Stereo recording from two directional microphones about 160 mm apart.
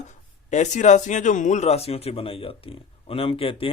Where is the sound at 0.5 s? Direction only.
50° left (ahead or behind).